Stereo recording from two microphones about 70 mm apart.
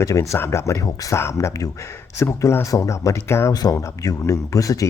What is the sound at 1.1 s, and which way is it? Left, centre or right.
Speech, left.